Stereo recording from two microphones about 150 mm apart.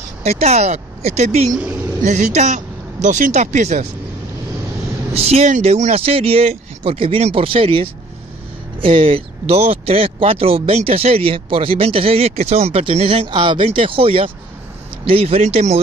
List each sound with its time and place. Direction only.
0.2 s speech: 45° right (ahead or behind)
5.1 s speech: 45° right (ahead or behind)